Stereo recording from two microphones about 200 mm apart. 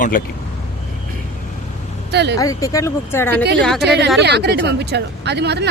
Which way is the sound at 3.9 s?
55° right (ahead or behind).